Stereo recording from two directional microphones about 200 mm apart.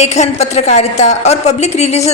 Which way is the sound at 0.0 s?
35° left (ahead or behind).